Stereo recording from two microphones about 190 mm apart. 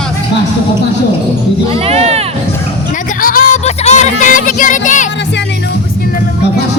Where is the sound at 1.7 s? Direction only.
30° right (ahead or behind).